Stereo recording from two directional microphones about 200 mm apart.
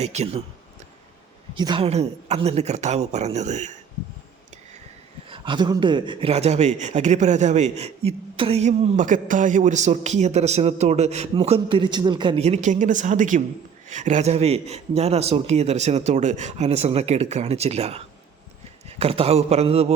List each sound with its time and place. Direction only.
0.0 s a man's voice: 35° right (ahead or behind)
1.5 s a man's voice: 25° right (ahead or behind)
5.3 s a man's voice: 25° right (ahead or behind)